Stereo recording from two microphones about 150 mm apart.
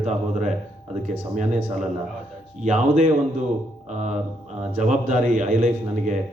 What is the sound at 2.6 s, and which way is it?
Speech, 55° right (ahead or behind).